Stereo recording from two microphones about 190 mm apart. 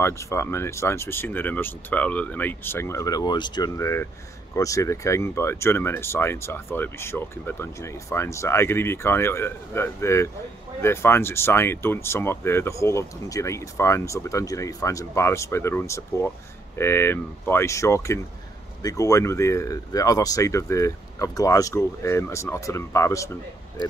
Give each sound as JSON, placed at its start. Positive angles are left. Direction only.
{"t": 0.0, "sound": "speech", "side_deg": 15}